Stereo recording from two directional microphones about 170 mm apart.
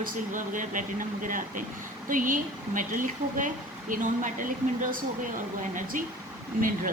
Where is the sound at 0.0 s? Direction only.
50° right (ahead or behind).